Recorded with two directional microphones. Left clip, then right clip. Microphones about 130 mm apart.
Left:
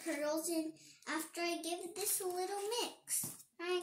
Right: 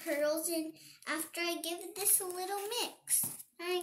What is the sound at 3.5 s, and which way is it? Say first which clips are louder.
Child singing: right 2 dB; 20° left (ahead or behind).